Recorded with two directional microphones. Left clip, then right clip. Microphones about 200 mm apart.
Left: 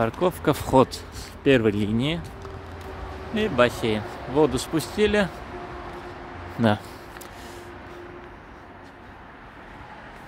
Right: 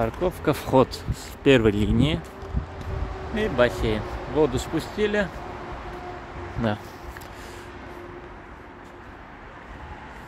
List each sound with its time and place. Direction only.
0.5 s speech: 10° left (ahead or behind)
3.3 s speech: 20° left (ahead or behind)
6.6 s speech: 35° left (ahead or behind)